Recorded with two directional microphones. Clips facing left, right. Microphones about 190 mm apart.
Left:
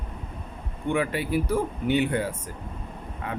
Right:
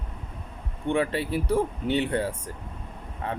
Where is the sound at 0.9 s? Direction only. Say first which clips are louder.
Even; 30° right (ahead or behind).